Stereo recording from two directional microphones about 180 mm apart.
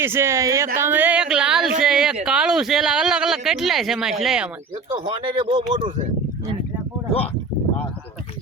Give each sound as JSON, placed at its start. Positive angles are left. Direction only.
{"t": 0.0, "sound": "speech", "side_deg": -15}
{"t": 0.8, "sound": "a sound", "side_deg": -10}
{"t": 2.2, "sound": "speech", "side_deg": -5}
{"t": 4.9, "sound": "speech", "side_deg": -25}